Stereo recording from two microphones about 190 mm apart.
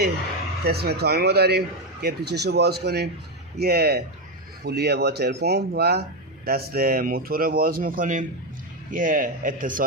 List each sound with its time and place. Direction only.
0.6 s speech: 55° right (ahead or behind)